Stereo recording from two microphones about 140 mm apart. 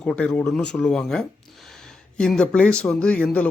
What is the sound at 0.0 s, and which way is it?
Speech, 5° left (ahead or behind).